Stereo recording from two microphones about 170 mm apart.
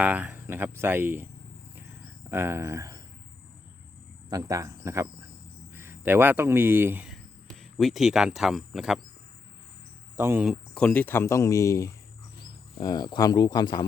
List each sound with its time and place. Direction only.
0.0 s speech: 10° right (ahead or behind)
2.3 s speech: 15° right (ahead or behind)
4.3 s speech: 20° right (ahead or behind); by 9.0 s centre (ahead or behind)
10.2 s speech: 15° right (ahead or behind)
10.4 s speech: centre (ahead or behind); by 13.8 s 25° left (ahead or behind)